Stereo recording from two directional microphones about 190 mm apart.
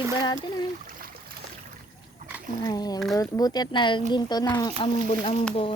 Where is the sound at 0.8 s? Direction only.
45° right (ahead or behind).